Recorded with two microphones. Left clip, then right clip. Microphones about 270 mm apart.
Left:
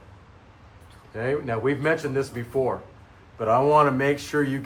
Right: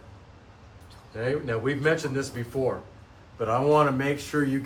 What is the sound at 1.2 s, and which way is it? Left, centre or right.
Speech, left.